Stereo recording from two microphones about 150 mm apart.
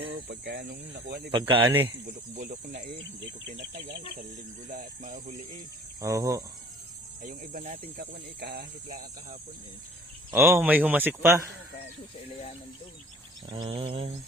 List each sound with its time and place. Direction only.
0.3 s speech: 90° right
1.3 s a sound: 35° right (ahead or behind)
1.6 s speech: 15° right (ahead or behind)
2.0 s cricket: 50° right (ahead or behind)
4.7 s speech: 55° right (ahead or behind)
6.0 s insect: 20° right (ahead or behind)
7.2 s speech: 60° right (ahead or behind); by 8.6 s 90° right
10.3 s speech: 15° right (ahead or behind)
13.5 s a sound: 35° right (ahead or behind)